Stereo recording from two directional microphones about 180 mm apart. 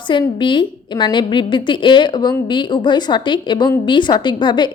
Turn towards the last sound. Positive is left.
turn(degrees=25)  # may be behind; listen again after turning